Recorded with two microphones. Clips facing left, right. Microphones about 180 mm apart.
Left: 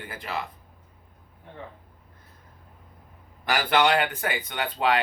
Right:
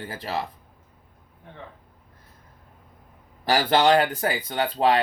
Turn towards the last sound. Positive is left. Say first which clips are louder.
# right 4 dB
turn(degrees=-35)  # may be behind; listen again after turning